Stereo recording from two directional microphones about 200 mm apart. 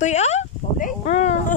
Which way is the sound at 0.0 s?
35° left (ahead or behind).